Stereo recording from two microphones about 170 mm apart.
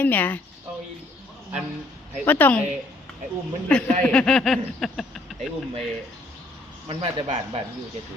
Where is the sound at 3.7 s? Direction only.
5° left (ahead or behind).